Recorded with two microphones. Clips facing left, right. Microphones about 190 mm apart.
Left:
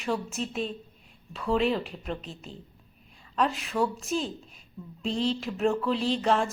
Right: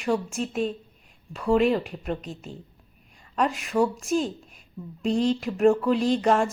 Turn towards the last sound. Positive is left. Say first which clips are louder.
# right 4 dB
turn(degrees=0)  # may be behind; listen again after turning